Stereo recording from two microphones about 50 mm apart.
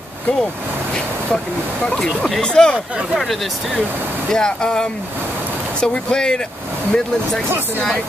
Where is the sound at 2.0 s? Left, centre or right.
Centre.